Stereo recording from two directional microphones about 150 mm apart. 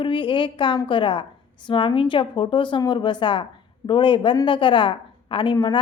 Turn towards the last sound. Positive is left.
turn(degrees=30)  # may be behind; listen again after turning